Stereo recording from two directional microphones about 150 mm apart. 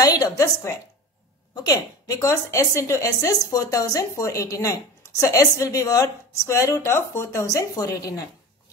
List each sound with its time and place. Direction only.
0.0 s a woman's voice: 25° left (ahead or behind)